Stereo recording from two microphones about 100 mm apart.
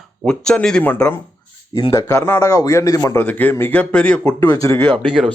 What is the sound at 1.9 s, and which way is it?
A man's voice, 30° left (ahead or behind).